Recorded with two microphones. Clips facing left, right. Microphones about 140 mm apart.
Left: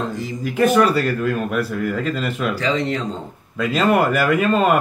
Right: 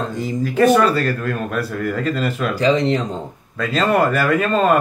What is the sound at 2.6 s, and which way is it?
Speech, 20° right (ahead or behind).